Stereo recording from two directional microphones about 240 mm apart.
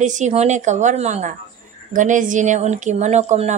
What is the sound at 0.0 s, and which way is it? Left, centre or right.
A woman's voice, right.